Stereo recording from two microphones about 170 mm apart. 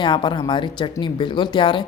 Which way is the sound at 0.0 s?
25° left (ahead or behind).